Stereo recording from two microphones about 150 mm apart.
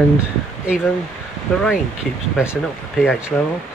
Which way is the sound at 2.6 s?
5° right (ahead or behind).